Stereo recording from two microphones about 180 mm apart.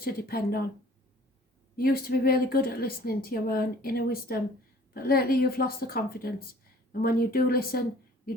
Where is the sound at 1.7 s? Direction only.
55° left (ahead or behind).